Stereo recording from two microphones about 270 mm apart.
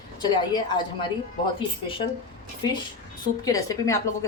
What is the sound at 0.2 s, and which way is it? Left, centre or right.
Speech, centre.